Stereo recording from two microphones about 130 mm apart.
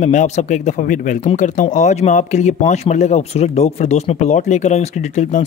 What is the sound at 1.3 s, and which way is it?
Speech, 70° left (ahead or behind).